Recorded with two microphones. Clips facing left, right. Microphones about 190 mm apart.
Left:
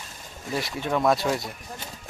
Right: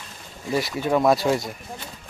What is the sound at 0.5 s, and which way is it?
Speech, 5° right (ahead or behind).